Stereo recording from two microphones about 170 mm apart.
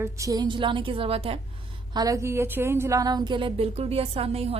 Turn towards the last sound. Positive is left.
turn(degrees=-35)  # may be behind; listen again after turning